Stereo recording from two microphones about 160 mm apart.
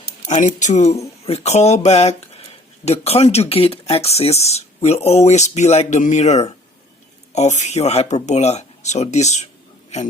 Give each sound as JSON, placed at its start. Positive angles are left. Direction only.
{"t": 0.3, "sound": "speech", "side_deg": 50}